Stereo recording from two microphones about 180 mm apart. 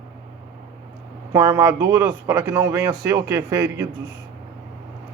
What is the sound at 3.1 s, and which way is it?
Speech, 15° right (ahead or behind).